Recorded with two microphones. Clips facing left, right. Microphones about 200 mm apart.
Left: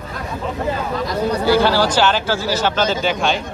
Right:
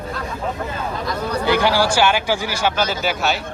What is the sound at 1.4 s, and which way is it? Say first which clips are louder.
Speech: left 1 dB; 15° right (ahead or behind).